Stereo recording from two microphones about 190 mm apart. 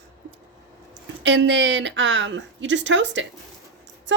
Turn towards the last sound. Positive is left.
turn(degrees=-70)  # may be behind; listen again after turning